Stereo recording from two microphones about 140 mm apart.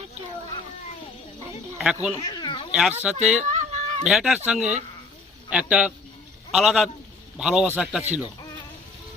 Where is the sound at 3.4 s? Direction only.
55° right (ahead or behind).